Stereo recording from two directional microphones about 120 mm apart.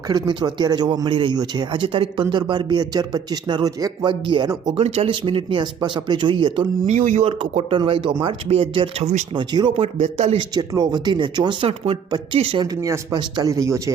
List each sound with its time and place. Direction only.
0.1 s speech: 35° right (ahead or behind)
4.1 s speech: 40° right (ahead or behind)
4.8 s speech: 50° right (ahead or behind)
6.8 s speech: 80° right
7.3 s speech: 50° right (ahead or behind)
9.0 s speech: 65° right (ahead or behind)
9.3 s speech: 40° right (ahead or behind)
9.7 s speech: 60° right (ahead or behind)
10.3 s speech: 35° right (ahead or behind)
12.8 s speech: 30° right (ahead or behind)